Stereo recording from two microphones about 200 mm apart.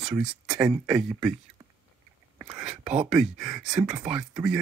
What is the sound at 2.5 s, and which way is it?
Speech, 5° right (ahead or behind).